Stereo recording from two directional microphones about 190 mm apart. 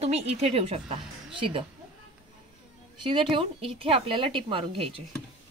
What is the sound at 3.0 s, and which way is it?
Speech, 25° right (ahead or behind).